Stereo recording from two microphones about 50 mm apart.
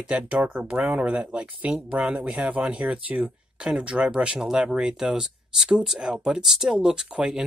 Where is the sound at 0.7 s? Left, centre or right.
Right.